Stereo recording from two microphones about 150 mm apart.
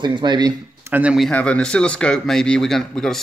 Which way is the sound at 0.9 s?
10° right (ahead or behind).